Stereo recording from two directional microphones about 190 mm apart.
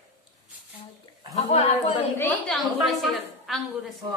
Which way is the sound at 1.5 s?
30° left (ahead or behind).